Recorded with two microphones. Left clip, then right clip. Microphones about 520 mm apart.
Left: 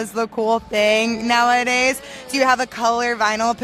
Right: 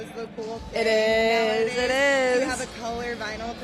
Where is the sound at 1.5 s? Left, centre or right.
Left.